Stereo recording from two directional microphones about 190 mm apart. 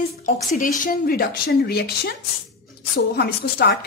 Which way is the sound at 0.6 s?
45° left (ahead or behind).